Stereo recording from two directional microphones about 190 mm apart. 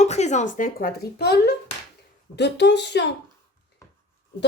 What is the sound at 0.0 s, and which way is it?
Speech, 35° left (ahead or behind).